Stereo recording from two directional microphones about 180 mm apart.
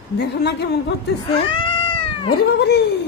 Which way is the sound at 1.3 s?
30° left (ahead or behind).